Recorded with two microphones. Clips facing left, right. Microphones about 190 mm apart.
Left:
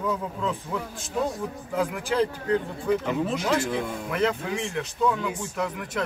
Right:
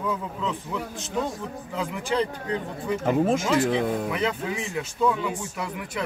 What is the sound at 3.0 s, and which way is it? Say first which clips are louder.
Speech: right 5 dB; 45° right (ahead or behind).